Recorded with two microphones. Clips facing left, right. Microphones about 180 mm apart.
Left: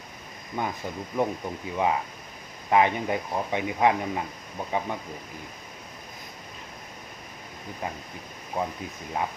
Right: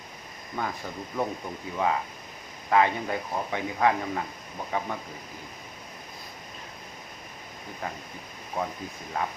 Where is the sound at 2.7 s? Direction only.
20° left (ahead or behind).